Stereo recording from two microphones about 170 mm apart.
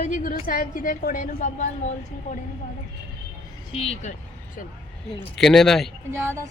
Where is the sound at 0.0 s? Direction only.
45° left (ahead or behind).